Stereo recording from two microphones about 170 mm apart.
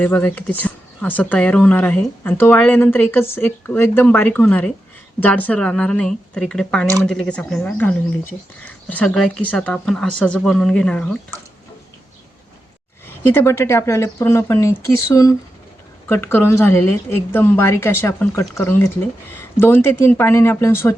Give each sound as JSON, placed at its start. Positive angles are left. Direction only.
{"t": 0.0, "sound": "speech", "side_deg": 10}
{"t": 13.3, "sound": "speech", "side_deg": 15}